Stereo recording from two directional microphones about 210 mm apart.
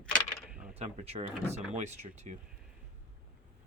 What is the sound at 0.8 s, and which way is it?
Speech, 30° right (ahead or behind).